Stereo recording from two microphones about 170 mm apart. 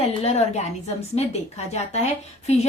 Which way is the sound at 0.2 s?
40° left (ahead or behind).